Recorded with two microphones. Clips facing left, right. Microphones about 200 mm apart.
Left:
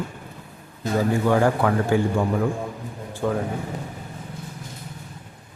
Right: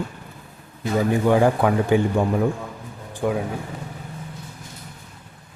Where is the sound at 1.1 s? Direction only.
15° right (ahead or behind).